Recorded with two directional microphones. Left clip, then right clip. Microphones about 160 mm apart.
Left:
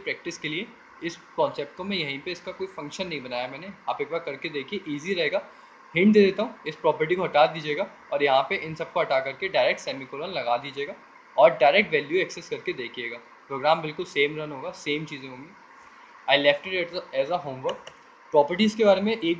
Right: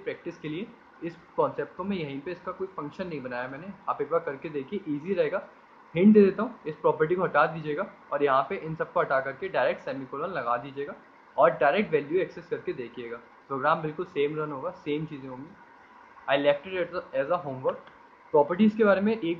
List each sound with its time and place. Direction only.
0.0 s speech: 50° left (ahead or behind)
16.3 s speech: 50° left (ahead or behind)